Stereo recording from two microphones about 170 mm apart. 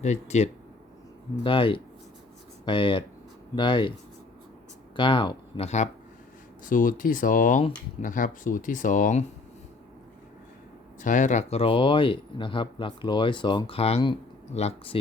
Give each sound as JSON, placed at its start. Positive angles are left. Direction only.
{"t": 0.0, "sound": "speech", "side_deg": 40}
{"t": 4.9, "sound": "speech", "side_deg": 30}
{"t": 6.7, "sound": "speech", "side_deg": 50}
{"t": 11.0, "sound": "speech", "side_deg": 45}